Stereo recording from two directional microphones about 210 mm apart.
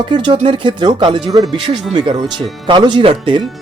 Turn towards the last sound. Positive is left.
turn(degrees=-25)  # may be behind; listen again after turning